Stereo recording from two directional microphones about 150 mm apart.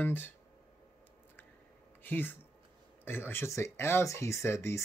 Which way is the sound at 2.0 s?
15° left (ahead or behind).